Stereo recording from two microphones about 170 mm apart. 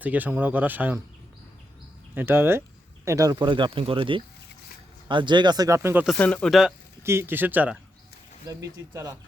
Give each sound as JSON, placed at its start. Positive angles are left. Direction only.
{"t": 0.0, "sound": "speech", "side_deg": -10}
{"t": 2.1, "sound": "speech", "side_deg": -15}
{"t": 6.1, "sound": "speech", "side_deg": 5}
{"t": 7.0, "sound": "speech", "side_deg": -15}